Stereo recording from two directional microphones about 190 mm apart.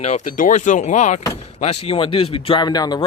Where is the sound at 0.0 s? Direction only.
40° left (ahead or behind).